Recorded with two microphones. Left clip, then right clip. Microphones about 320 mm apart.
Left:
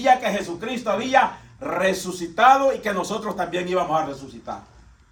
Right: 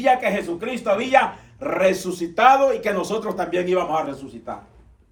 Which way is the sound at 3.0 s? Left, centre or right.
Centre.